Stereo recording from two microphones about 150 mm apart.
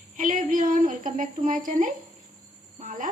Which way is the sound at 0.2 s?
60° right (ahead or behind).